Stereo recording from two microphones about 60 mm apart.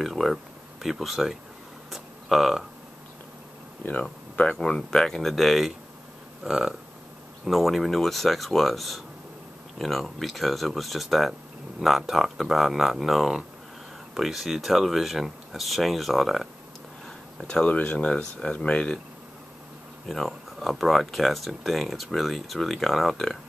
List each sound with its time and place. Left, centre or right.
0.0 s speech: centre
1.9 s a sound: centre
4.4 s speech: centre
17.4 s speech: centre
20.1 s speech: centre